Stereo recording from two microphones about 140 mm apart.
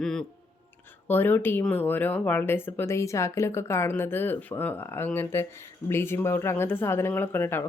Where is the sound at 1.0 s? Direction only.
15° left (ahead or behind).